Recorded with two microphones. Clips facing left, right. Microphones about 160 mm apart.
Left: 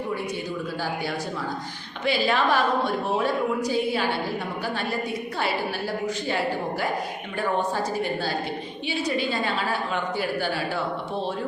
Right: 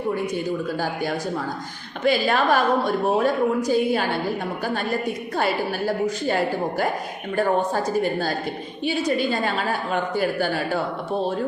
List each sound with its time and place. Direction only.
2.0 s a woman's voice: 45° right (ahead or behind)
6.1 s a woman's voice: 45° right (ahead or behind)
8.9 s a woman's voice: 45° right (ahead or behind)